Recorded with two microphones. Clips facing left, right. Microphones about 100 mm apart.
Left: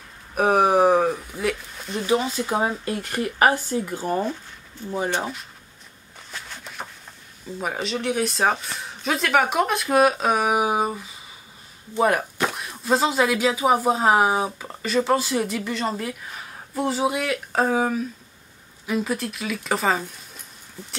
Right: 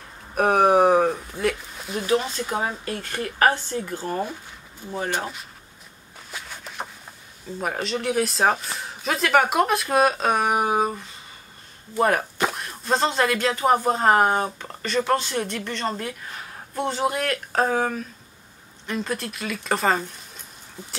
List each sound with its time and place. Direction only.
0.3 s a sound: centre (ahead or behind)
2.8 s speech: 20° left (ahead or behind)
4.8 s speech: 10° right (ahead or behind)
5.2 s speech: centre (ahead or behind)
6.3 s a sound: 5° right (ahead or behind)
7.6 s speech: centre (ahead or behind)